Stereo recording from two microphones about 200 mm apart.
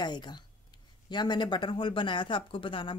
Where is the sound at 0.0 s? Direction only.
20° left (ahead or behind).